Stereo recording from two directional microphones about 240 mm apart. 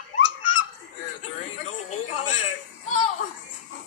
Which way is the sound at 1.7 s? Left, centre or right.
Left.